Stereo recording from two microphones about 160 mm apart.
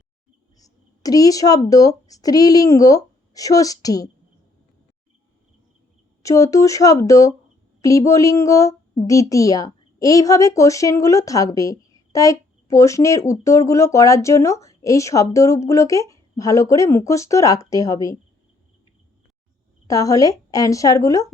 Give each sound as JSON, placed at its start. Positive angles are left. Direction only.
{"t": 0.6, "sound": "speech", "side_deg": 25}
{"t": 6.2, "sound": "a woman's voice", "side_deg": 20}
{"t": 19.9, "sound": "a woman's voice", "side_deg": 20}